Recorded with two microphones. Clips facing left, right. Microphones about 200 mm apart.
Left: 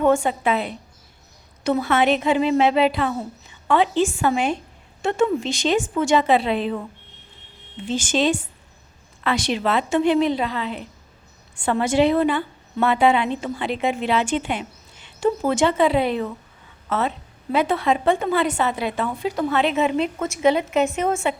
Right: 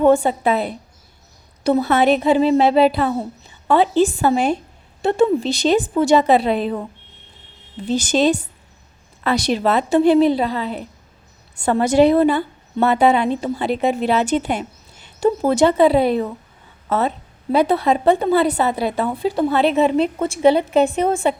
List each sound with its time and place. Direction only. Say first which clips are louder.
0.0 s a woman's voice: right 4 dB; 35° right (ahead or behind)